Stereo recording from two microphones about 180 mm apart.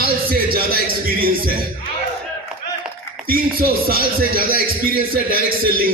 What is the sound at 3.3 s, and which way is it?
Speech, 55° right (ahead or behind).